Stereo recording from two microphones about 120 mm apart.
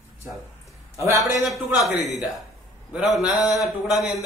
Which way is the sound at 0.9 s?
25° right (ahead or behind).